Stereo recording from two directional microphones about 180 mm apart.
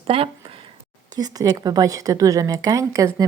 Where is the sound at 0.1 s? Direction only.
30° right (ahead or behind).